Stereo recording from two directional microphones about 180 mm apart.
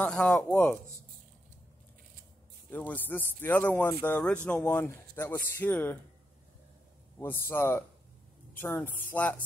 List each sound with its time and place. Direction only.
0.0 s speech: 5° left (ahead or behind)
2.7 s speech: 10° left (ahead or behind)
7.2 s speech: 15° left (ahead or behind)